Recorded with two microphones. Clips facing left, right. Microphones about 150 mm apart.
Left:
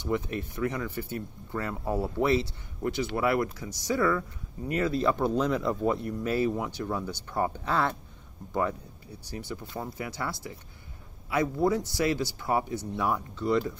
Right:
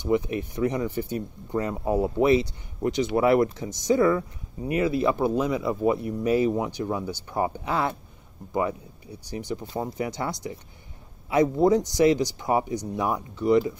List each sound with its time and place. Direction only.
0.0 s speech: 15° right (ahead or behind)